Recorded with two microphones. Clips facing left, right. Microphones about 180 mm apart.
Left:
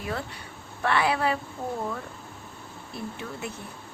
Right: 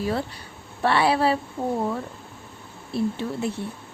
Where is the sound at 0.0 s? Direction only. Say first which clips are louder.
Right 7 dB; 30° right (ahead or behind).